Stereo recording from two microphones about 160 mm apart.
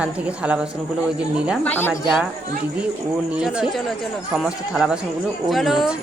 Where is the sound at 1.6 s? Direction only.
10° left (ahead or behind).